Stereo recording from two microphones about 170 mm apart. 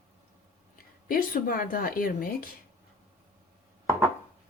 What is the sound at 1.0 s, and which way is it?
A woman's voice, 60° left (ahead or behind).